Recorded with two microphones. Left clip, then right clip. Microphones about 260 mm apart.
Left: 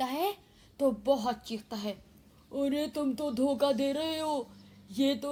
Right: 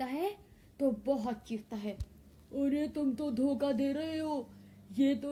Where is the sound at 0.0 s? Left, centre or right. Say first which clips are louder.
Left 4 dB; left.